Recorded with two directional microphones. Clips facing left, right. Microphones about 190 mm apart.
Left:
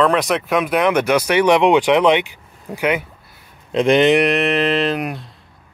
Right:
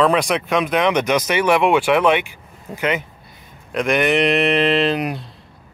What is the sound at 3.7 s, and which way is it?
Speech, 25° left (ahead or behind).